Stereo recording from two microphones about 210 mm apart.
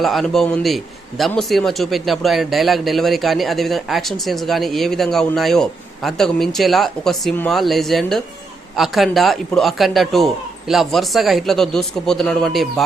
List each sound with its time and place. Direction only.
0.0 s a man's voice: centre (ahead or behind)